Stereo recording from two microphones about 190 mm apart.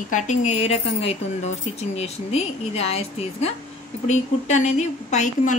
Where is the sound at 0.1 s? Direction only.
40° left (ahead or behind).